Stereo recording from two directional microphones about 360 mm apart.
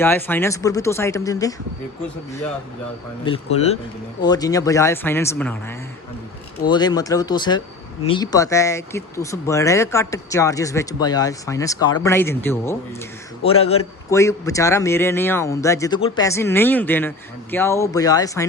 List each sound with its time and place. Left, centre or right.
0.0 s speech: centre
3.2 s speech: centre